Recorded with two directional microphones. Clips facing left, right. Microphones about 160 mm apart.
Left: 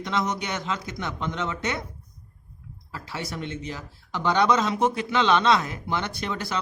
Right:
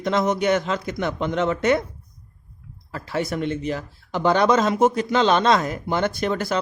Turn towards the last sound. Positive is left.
turn(degrees=-50)  # may be behind; listen again after turning